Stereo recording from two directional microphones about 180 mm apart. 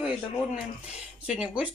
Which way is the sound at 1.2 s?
5° right (ahead or behind).